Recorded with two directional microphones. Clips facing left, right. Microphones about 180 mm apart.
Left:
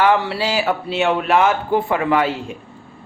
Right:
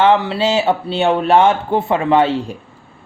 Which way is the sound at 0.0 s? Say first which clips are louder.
Right 3 dB; 25° right (ahead or behind).